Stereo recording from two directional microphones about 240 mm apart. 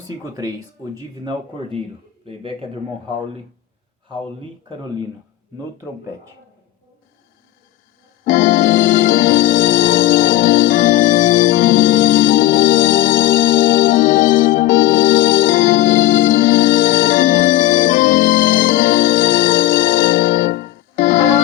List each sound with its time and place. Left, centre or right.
0.9 s speech: centre
8.2 s electric piano: left
9.4 s music: left
9.9 s organ: left